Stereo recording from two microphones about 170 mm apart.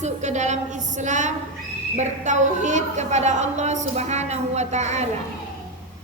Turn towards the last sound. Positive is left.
turn(degrees=-40)  # may be behind; listen again after turning